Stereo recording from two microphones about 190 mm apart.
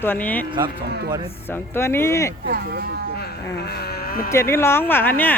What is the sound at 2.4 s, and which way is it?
Speech, 55° right (ahead or behind).